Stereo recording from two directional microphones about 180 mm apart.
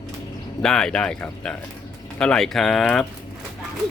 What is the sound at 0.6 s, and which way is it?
Speech, 5° left (ahead or behind).